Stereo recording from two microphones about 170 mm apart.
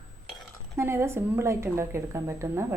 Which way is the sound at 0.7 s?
15° right (ahead or behind).